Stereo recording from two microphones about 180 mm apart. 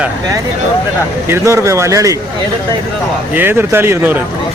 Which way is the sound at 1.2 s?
15° right (ahead or behind).